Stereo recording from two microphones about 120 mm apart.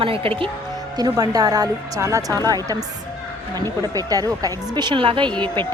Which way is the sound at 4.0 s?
30° right (ahead or behind).